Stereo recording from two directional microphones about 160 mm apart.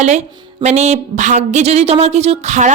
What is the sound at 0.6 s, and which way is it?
A woman's voice, 45° right (ahead or behind).